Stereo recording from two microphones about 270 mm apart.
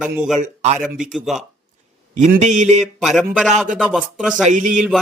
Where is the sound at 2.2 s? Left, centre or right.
Right.